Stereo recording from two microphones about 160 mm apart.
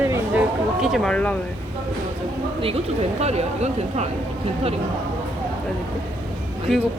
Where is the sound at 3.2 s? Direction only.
40° right (ahead or behind).